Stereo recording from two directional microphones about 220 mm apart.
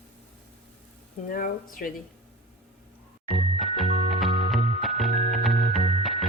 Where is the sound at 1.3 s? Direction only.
40° left (ahead or behind).